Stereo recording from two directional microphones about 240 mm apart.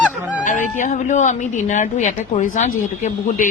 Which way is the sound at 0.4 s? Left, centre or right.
Left.